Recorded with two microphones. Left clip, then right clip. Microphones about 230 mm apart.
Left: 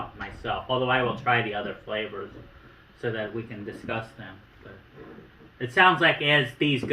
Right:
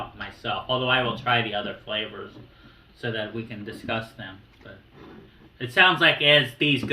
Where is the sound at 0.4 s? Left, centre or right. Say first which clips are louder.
Right 1 dB; centre.